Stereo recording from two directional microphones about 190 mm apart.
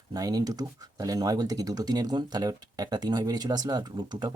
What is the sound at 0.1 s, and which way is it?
Speech, 20° right (ahead or behind).